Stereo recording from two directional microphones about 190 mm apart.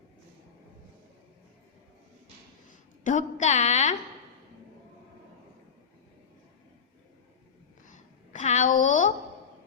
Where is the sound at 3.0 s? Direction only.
40° left (ahead or behind).